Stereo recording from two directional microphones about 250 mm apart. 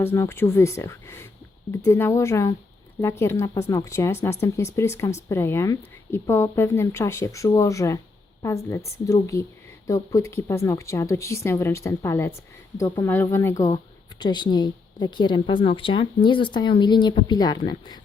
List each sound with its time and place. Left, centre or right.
0.0 s a woman's voice: centre